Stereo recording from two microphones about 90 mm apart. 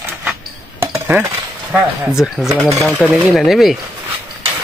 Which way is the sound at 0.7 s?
25° right (ahead or behind).